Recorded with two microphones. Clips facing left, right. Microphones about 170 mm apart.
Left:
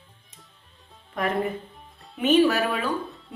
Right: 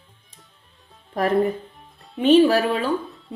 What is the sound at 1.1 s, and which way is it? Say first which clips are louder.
A woman's voice: right 6 dB; 35° right (ahead or behind).